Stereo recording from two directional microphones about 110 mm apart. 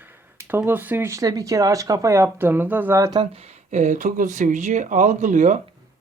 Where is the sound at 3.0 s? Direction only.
35° right (ahead or behind).